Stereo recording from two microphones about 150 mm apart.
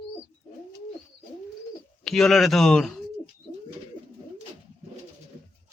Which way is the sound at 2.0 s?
Centre (ahead or behind).